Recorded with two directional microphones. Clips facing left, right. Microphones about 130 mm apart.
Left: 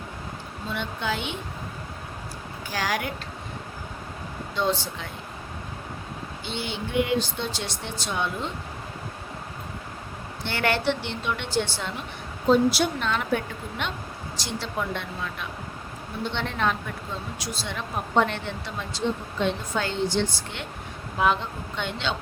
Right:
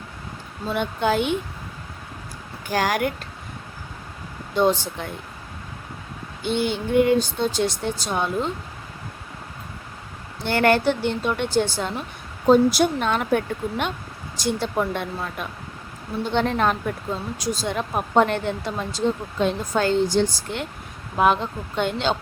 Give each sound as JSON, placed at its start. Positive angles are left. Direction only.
{"t": 0.7, "sound": "speech", "side_deg": -50}
{"t": 2.6, "sound": "speech", "side_deg": -50}
{"t": 4.5, "sound": "speech", "side_deg": -50}
{"t": 6.4, "sound": "speech", "side_deg": -50}
{"t": 10.4, "sound": "speech", "side_deg": -45}
{"t": 21.8, "sound": "a man's voice", "side_deg": -40}